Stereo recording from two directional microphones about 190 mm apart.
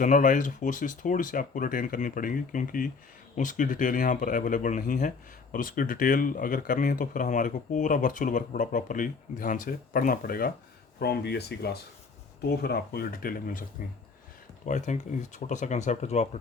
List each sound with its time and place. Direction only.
0.0 s speech: 40° left (ahead or behind)